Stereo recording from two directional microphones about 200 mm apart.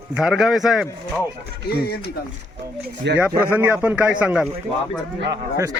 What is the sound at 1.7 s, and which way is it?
Speech, 50° left (ahead or behind).